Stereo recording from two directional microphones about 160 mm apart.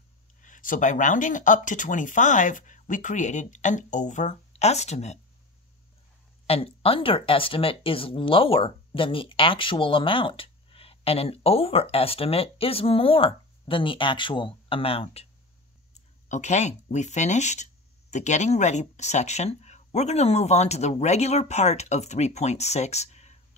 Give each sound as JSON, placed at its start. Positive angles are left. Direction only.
{"t": 0.4, "sound": "speech", "side_deg": 55}
{"t": 6.4, "sound": "speech", "side_deg": 35}
{"t": 15.9, "sound": "speech", "side_deg": 50}